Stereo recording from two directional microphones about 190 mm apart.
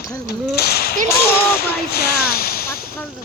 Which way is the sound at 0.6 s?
55° left (ahead or behind).